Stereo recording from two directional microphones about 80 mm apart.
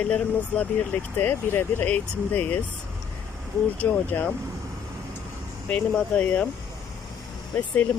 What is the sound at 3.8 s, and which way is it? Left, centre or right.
Speech, centre.